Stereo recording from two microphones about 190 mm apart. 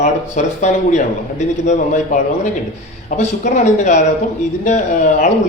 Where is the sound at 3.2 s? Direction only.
35° left (ahead or behind).